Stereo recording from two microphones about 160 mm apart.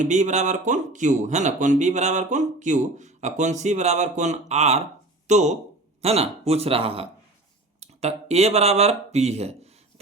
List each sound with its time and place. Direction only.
0.0 s speech: 45° right (ahead or behind)